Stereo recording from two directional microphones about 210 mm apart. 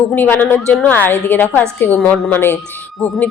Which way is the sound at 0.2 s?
10° left (ahead or behind).